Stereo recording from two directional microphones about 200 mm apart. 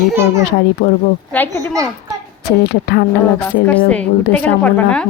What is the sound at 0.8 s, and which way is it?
Speech, 55° left (ahead or behind).